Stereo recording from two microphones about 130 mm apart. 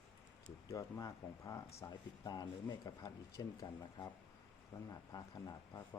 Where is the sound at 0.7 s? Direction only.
25° left (ahead or behind).